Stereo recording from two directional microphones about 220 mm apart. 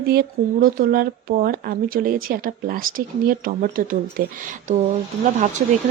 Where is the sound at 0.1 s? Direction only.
40° right (ahead or behind).